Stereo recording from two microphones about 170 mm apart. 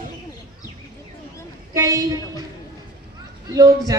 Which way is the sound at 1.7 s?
20° right (ahead or behind).